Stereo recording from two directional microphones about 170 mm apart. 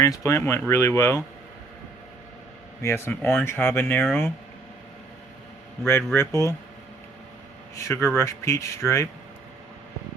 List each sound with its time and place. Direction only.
0.0 s speech: 20° left (ahead or behind)
2.8 s speech: 15° left (ahead or behind)
6.0 s speech: 10° left (ahead or behind)
7.8 s speech: 15° left (ahead or behind)